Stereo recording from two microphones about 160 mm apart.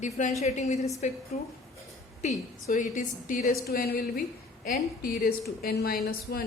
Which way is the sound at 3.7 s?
70° left (ahead or behind).